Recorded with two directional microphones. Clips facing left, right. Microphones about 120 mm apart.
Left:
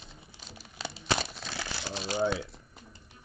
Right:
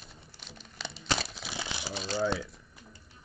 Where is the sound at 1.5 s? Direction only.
15° right (ahead or behind).